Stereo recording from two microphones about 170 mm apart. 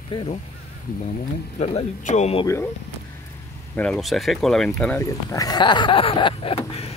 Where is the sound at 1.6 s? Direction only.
40° left (ahead or behind).